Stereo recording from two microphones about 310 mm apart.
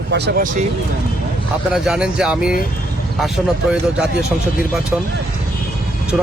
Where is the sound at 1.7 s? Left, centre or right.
Centre.